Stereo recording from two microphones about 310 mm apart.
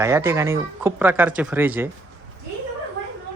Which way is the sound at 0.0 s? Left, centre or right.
Centre.